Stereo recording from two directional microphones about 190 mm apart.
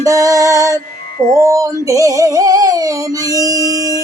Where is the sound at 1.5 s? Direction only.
15° right (ahead or behind).